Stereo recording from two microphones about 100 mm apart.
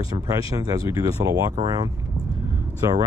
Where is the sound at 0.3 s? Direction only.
35° right (ahead or behind).